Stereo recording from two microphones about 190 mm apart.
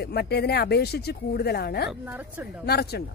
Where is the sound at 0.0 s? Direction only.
55° left (ahead or behind).